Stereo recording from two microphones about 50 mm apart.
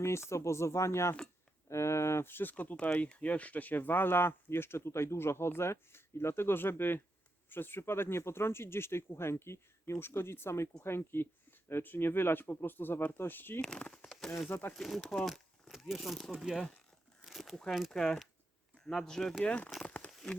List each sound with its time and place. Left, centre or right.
0.0 s speech: left
2.3 s speech: left
10.8 s speech: left
13.6 s a sound: centre
14.8 s speech: centre
17.2 s a sound: centre
17.5 s speech: centre
19.5 s speech: left
19.8 s crumpling: left
20.1 s a sound: centre